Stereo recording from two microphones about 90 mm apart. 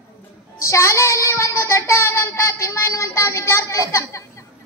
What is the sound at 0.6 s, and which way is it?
Child singing, 30° left (ahead or behind).